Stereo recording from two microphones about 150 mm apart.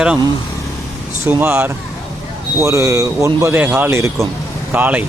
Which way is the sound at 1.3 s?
15° right (ahead or behind).